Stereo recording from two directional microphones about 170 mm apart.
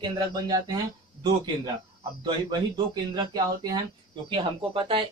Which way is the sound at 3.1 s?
25° right (ahead or behind).